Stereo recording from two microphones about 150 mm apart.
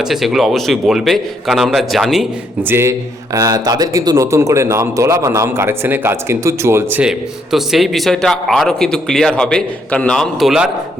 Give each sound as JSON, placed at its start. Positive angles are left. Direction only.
{"t": 0.0, "sound": "a man's voice", "side_deg": 0}
{"t": 2.6, "sound": "speech", "side_deg": -15}
{"t": 3.3, "sound": "speech", "side_deg": -25}